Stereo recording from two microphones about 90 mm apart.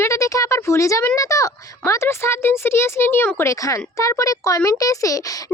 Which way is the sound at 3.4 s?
35° left (ahead or behind).